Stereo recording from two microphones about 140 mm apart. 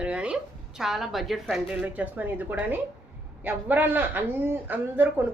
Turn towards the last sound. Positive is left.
turn(degrees=-15)  # may be behind; listen again after turning